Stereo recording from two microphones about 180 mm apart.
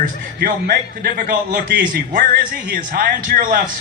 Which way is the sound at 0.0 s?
50° right (ahead or behind).